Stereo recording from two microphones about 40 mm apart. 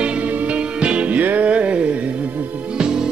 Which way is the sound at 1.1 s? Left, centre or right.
Right.